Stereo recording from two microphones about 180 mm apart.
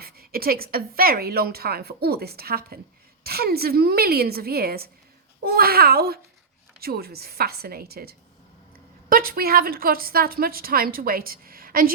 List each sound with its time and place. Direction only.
0.0 s a woman's voice: 55° right (ahead or behind)